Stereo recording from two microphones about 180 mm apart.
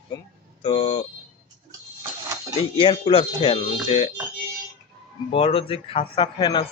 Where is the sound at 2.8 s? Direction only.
30° left (ahead or behind).